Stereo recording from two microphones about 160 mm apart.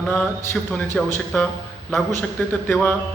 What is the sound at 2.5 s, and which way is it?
Speech, 5° left (ahead or behind).